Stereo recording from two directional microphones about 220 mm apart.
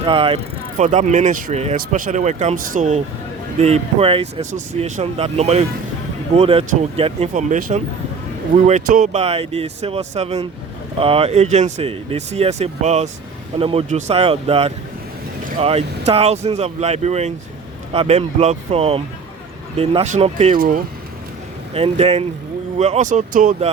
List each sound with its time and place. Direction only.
0.0 s speech: 25° right (ahead or behind)
20.6 s speech: 40° right (ahead or behind)
21.7 s speech: 25° right (ahead or behind)